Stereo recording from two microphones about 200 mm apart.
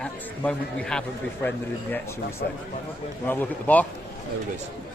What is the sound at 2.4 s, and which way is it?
Speech, 50° left (ahead or behind).